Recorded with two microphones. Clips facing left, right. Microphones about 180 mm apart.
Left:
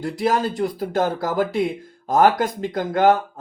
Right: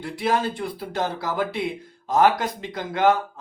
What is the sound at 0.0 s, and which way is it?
Speech, 40° left (ahead or behind).